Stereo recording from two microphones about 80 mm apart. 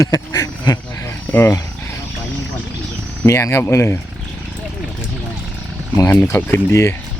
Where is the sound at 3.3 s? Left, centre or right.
Left.